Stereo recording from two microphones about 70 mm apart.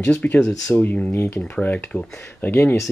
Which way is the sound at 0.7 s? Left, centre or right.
Left.